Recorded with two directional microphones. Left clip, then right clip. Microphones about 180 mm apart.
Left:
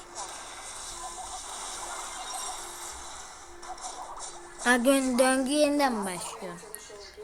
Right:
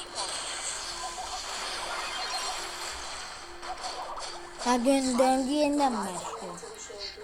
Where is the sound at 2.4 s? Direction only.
20° right (ahead or behind).